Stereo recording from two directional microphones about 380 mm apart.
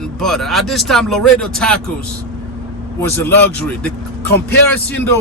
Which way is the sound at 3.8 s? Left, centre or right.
Centre.